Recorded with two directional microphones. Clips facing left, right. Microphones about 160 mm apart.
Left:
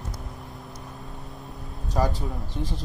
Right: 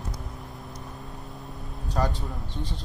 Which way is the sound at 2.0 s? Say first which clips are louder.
Left 2 dB; 5° left (ahead or behind).